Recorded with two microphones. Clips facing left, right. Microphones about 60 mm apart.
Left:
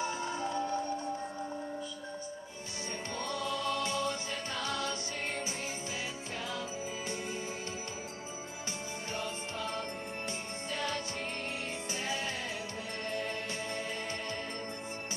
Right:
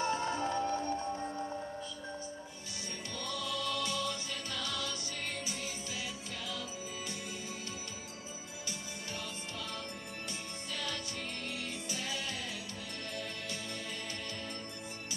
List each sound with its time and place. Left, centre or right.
0.0 s music: centre
3.2 s music: left
9.1 s music: left